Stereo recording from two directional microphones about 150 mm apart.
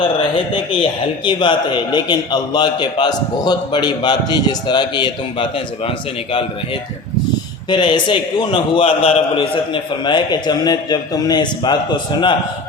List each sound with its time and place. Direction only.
0.5 s a man's voice: 35° left (ahead or behind)
7.7 s a man's voice: 30° left (ahead or behind)